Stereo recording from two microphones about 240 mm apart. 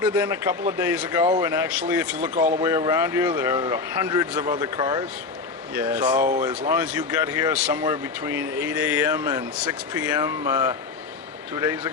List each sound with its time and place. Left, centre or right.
0.0 s speech: centre